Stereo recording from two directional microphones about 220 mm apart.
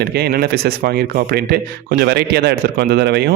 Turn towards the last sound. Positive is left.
turn(degrees=-50)  # may be behind; listen again after turning